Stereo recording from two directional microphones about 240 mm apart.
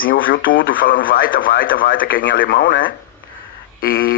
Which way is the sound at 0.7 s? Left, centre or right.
Left.